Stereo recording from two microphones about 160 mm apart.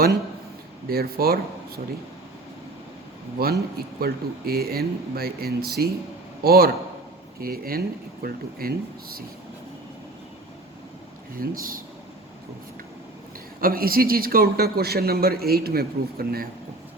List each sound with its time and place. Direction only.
0.9 s speech: 70° right (ahead or behind)
3.4 s a man's voice: 75° right (ahead or behind)
11.3 s speech: 60° right (ahead or behind)
13.6 s speech: 65° right (ahead or behind)